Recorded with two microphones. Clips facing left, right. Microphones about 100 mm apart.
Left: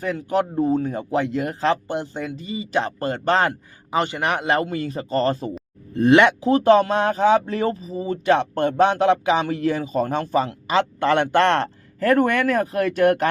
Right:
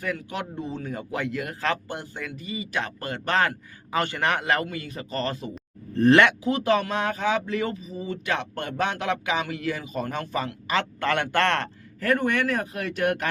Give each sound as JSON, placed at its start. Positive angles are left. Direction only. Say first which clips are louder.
{"t": 0.0, "sound": "speech", "louder": "left 8 dB", "side_deg": 30}
{"t": 5.9, "sound": "speech", "louder": "left 3 dB", "side_deg": 15}
{"t": 6.4, "sound": "speech", "louder": "left 8 dB", "side_deg": 35}
{"t": 12.1, "sound": "speech", "louder": "left 5 dB", "side_deg": 50}